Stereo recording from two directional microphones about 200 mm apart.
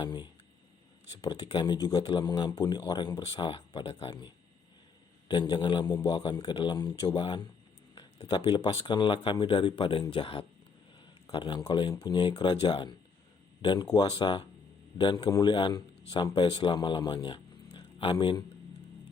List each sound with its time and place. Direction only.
0.0 s speech: 25° left (ahead or behind)
5.3 s speech: 25° left (ahead or behind)
7.9 s a sound: 25° left (ahead or behind)
8.4 s a man's voice: 20° left (ahead or behind)